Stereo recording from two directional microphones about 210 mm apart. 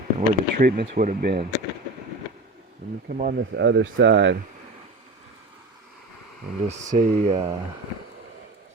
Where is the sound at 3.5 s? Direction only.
60° right (ahead or behind).